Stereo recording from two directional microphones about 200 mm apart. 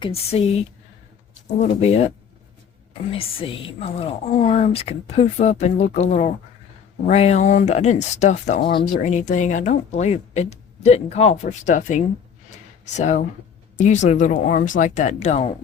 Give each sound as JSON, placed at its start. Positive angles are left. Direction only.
{"t": 0.0, "sound": "a woman's voice", "side_deg": 30}